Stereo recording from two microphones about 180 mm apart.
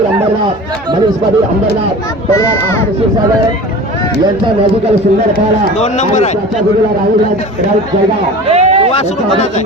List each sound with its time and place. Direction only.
2.3 s speech: 15° left (ahead or behind)
5.8 s speech: 40° left (ahead or behind)
8.4 s a sound: 35° right (ahead or behind)